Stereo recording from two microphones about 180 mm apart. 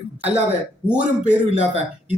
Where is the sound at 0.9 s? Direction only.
5° right (ahead or behind).